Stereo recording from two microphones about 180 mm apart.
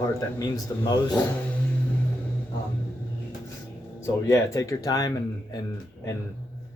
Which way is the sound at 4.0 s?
15° left (ahead or behind).